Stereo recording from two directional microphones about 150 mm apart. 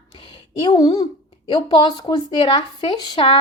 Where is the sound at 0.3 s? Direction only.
30° left (ahead or behind).